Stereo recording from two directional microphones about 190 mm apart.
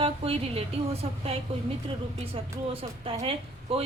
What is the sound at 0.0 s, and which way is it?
A woman's voice, 30° right (ahead or behind).